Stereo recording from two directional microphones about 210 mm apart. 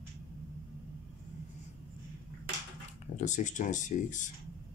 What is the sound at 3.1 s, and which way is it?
Speech, 35° left (ahead or behind).